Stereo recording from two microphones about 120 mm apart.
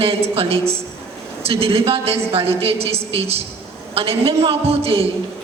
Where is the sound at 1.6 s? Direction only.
55° right (ahead or behind).